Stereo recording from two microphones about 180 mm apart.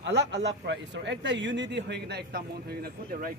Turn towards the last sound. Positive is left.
turn(degrees=-60)  # may be behind; listen again after turning